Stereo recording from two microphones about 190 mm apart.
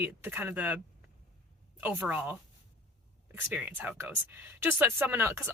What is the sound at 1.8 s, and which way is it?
Speech, 10° right (ahead or behind).